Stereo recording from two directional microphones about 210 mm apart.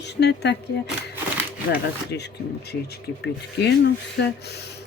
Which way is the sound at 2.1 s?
55° left (ahead or behind).